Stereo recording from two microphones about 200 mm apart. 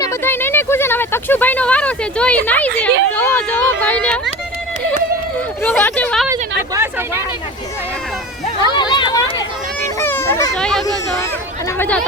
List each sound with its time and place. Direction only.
0.0 s speech: 10° left (ahead or behind)
5.6 s speech: 10° left (ahead or behind)
8.6 s a sound: 20° left (ahead or behind)
10.0 s a sound: 10° left (ahead or behind)
10.6 s speech: centre (ahead or behind)
10.8 s speech: 15° left (ahead or behind)